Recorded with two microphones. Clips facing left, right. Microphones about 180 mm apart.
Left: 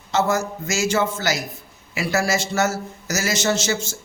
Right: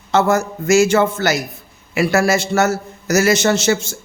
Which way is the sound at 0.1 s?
60° right (ahead or behind).